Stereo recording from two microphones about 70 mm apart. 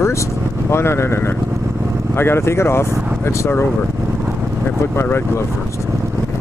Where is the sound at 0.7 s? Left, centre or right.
Left.